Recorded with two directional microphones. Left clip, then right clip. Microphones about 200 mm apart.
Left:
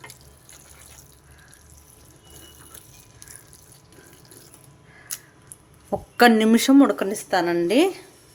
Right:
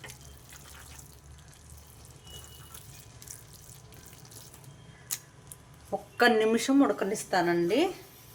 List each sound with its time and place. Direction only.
6.1 s a woman's voice: 45° left (ahead or behind)